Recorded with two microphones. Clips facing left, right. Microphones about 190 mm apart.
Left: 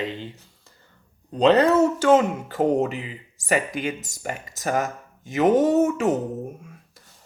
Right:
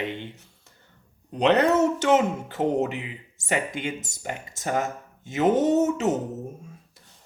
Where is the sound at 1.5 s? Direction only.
25° right (ahead or behind).